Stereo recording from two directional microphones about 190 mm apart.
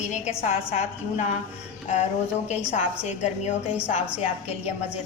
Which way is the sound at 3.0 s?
35° left (ahead or behind).